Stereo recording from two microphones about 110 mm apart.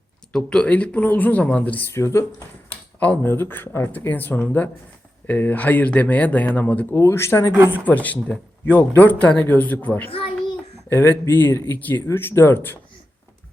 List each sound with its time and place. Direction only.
0.3 s speech: 10° left (ahead or behind); by 2.2 s 25° left (ahead or behind)
2.6 s speech: 15° left (ahead or behind)
7.5 s speech: 15° right (ahead or behind)
7.9 s speech: 15° left (ahead or behind)